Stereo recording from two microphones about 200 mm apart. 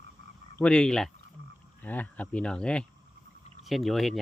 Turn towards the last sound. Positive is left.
turn(degrees=0)  # may be behind; listen again after turning